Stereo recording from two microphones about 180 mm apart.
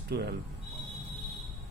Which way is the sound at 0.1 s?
65° right (ahead or behind).